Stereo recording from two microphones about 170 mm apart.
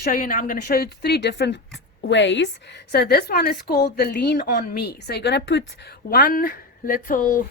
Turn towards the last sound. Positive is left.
turn(degrees=55)  # may be behind; listen again after turning